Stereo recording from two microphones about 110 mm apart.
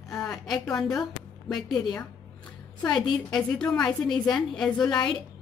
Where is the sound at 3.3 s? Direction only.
5° left (ahead or behind).